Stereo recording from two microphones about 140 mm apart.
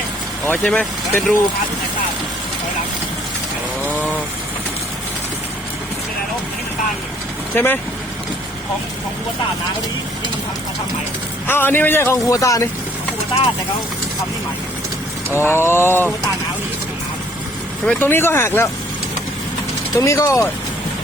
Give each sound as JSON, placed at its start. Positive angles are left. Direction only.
{"t": 0.4, "sound": "a man's voice", "side_deg": 10}
{"t": 7.5, "sound": "a man's voice", "side_deg": 15}
{"t": 11.4, "sound": "a man's voice", "side_deg": 15}
{"t": 15.4, "sound": "a man's voice", "side_deg": 15}
{"t": 17.8, "sound": "a man's voice", "side_deg": 15}
{"t": 20.0, "sound": "speech", "side_deg": 20}